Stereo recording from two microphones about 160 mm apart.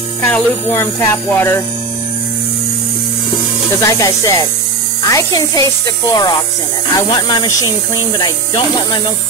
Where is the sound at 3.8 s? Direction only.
20° left (ahead or behind).